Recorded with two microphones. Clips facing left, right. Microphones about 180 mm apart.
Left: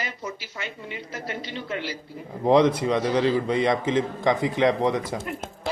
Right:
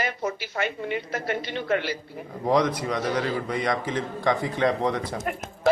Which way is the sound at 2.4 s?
25° left (ahead or behind).